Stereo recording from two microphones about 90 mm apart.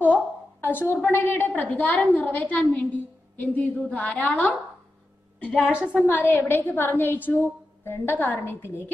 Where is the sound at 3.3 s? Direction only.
20° left (ahead or behind).